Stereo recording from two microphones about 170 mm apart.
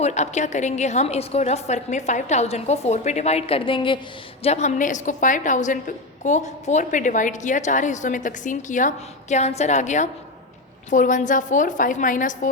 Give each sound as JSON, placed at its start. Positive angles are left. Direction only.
{"t": 0.0, "sound": "a woman's voice", "side_deg": 40}
{"t": 4.4, "sound": "a woman's voice", "side_deg": 40}